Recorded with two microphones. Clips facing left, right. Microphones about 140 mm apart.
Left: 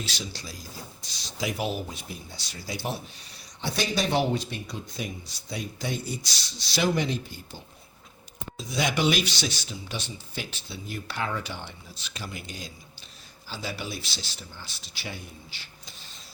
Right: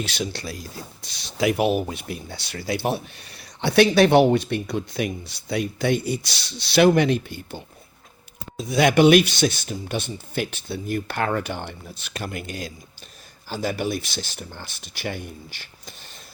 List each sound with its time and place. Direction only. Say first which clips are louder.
0.0 s speech: right 8 dB; 60° right (ahead or behind)